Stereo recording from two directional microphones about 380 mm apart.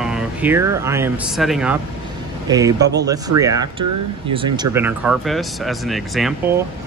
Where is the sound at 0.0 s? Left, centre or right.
Centre.